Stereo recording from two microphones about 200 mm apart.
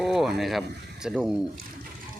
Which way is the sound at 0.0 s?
Centre (ahead or behind).